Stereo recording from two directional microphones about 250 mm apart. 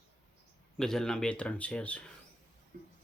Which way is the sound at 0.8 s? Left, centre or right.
Centre.